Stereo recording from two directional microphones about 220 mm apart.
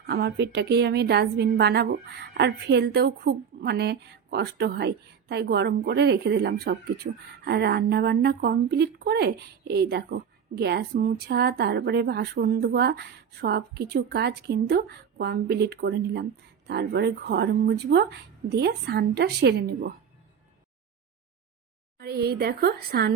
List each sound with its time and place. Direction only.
0.1 s a woman's voice: 50° right (ahead or behind)
21.9 s a woman's voice: 45° right (ahead or behind)